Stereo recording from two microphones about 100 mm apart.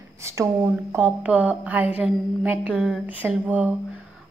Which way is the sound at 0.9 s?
15° right (ahead or behind).